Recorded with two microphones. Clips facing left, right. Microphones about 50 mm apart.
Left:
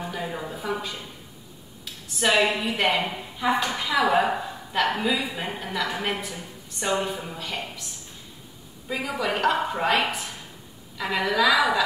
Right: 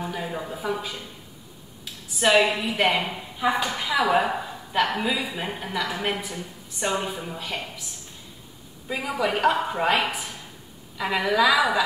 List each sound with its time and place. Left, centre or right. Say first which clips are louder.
0.0 s a woman's voice: right 1 dB; centre
2.0 s a woman's voice: right 2 dB; centre
8.8 s a woman's voice: right 1 dB; centre